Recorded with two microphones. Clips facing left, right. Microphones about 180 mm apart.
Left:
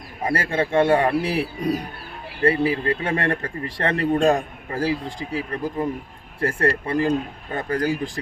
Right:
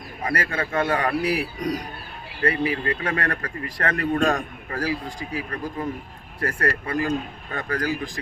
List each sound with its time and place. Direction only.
0.2 s speech: 30° left (ahead or behind)